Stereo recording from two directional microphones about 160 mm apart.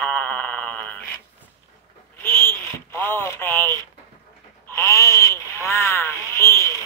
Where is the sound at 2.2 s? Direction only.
15° left (ahead or behind).